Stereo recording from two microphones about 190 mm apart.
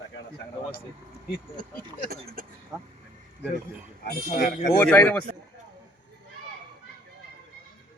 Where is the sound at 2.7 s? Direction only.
15° right (ahead or behind).